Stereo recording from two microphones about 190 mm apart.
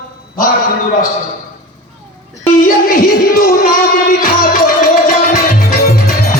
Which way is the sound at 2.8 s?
50° left (ahead or behind).